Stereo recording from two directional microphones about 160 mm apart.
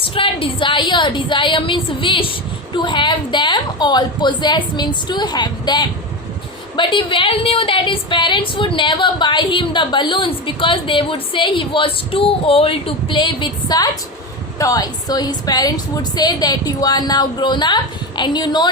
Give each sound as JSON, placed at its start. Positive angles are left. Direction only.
{"t": 0.0, "sound": "a woman's voice", "side_deg": 35}